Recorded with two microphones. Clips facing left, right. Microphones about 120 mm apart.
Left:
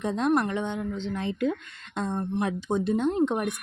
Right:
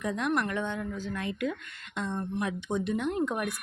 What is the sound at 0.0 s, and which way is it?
A woman's voice, 30° left (ahead or behind).